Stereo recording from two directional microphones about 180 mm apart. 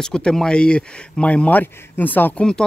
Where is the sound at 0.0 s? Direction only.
5° left (ahead or behind).